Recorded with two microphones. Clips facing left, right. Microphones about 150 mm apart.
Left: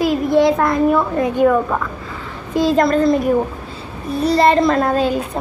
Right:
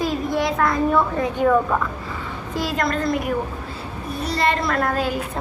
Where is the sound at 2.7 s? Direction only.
35° left (ahead or behind).